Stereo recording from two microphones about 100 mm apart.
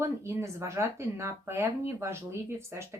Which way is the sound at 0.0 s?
25° right (ahead or behind).